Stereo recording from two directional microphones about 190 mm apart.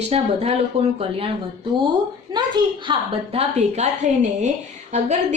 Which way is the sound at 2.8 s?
30° right (ahead or behind).